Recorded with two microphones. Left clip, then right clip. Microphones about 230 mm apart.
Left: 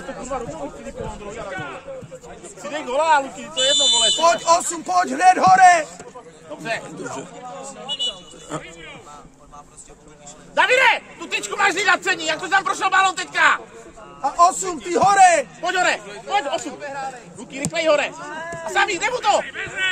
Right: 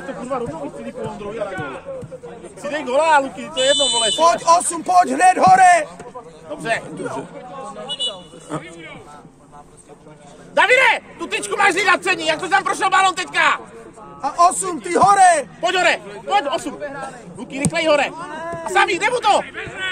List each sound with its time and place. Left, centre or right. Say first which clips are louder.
2.6 s speech: right 3 dB; right
8.5 s speech: right 2 dB; centre
10.5 s speech: right 2 dB; right
14.2 s a man's voice: right 1 dB; centre
15.6 s speech: right 3 dB; right
16.3 s speech: right 3 dB; right
18.3 s a sound: right 2 dB; right
18.7 s speech: right 3 dB; right
19.4 s a man's voice: left 3 dB; centre